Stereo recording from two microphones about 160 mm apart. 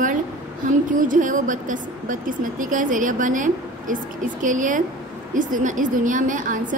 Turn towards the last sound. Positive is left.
turn(degrees=-55)  # may be behind; listen again after turning